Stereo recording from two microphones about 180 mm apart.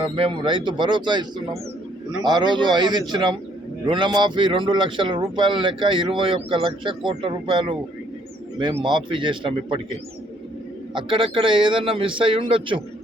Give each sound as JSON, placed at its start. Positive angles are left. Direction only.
{"t": 0.0, "sound": "a man's voice", "side_deg": -30}
{"t": 2.2, "sound": "a man's voice", "side_deg": -25}
{"t": 8.8, "sound": "a man's voice", "side_deg": -25}
{"t": 10.9, "sound": "a man's voice", "side_deg": -25}